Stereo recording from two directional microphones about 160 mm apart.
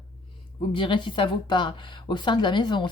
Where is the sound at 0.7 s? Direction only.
30° left (ahead or behind).